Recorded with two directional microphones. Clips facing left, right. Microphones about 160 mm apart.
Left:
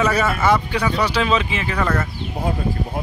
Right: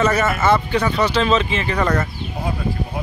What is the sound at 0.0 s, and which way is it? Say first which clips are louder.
Speech: right 1 dB; 10° left (ahead or behind).